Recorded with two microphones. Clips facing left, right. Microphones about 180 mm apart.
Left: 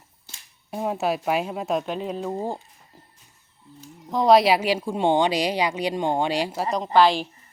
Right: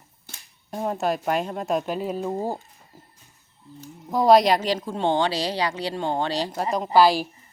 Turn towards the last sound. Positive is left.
turn(degrees=-5)  # may be behind; listen again after turning